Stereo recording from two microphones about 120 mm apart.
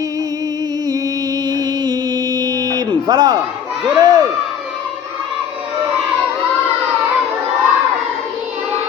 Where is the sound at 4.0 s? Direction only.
35° right (ahead or behind).